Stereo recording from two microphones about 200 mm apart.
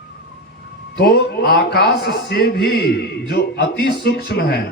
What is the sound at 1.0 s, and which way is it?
A man's voice, 50° left (ahead or behind).